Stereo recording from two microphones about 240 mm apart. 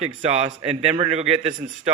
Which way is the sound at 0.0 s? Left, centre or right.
Right.